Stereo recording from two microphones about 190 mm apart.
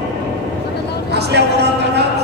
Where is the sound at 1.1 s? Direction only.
60° right (ahead or behind).